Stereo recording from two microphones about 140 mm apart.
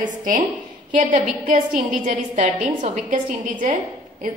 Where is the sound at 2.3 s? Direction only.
55° right (ahead or behind).